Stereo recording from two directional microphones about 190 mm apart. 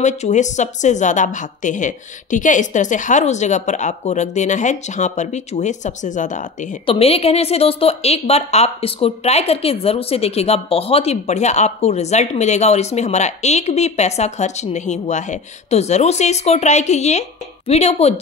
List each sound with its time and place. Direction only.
0.0 s a woman's voice: 40° left (ahead or behind)
6.9 s a woman's voice: 30° left (ahead or behind)